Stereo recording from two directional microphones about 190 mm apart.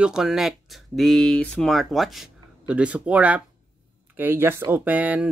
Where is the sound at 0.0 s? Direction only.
5° right (ahead or behind).